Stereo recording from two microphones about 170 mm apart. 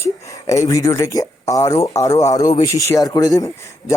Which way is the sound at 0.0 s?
20° left (ahead or behind).